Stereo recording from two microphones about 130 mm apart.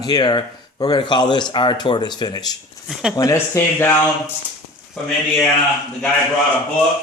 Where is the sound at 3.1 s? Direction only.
25° left (ahead or behind).